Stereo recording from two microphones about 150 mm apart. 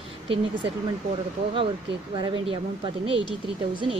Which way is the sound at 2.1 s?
35° right (ahead or behind).